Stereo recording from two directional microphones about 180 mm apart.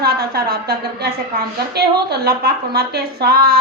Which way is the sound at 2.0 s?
60° right (ahead or behind).